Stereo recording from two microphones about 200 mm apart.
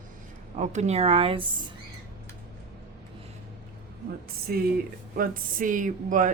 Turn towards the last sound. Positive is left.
turn(degrees=-40)  # may be behind; listen again after turning